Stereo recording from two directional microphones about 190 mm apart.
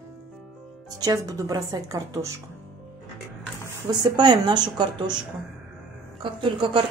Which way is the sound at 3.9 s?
20° right (ahead or behind).